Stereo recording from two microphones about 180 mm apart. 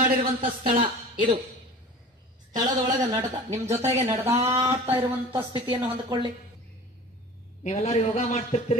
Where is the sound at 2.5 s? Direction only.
20° right (ahead or behind).